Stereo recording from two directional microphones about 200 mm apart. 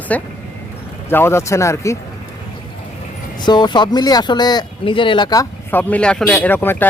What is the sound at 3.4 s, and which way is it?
Speech, 20° left (ahead or behind).